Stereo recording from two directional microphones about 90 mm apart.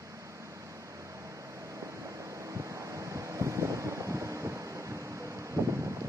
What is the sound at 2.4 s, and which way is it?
Wind noise, 35° right (ahead or behind).